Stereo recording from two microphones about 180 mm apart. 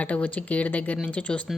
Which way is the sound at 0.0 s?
10° left (ahead or behind).